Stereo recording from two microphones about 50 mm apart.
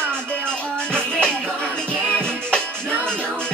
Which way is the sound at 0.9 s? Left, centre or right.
Centre.